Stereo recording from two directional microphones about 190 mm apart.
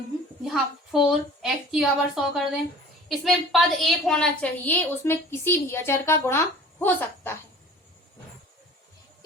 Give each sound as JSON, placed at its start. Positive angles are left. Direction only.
{"t": 0.4, "sound": "a woman's voice", "side_deg": 0}